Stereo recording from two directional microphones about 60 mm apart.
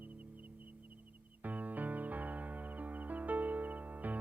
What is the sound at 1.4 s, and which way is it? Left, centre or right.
Music, right.